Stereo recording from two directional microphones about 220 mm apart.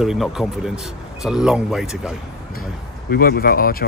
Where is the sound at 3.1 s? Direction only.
45° left (ahead or behind).